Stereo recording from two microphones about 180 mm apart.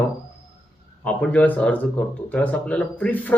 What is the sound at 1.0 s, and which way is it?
Speech, 5° left (ahead or behind).